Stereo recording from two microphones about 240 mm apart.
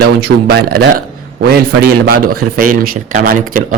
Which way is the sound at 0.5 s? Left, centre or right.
Right.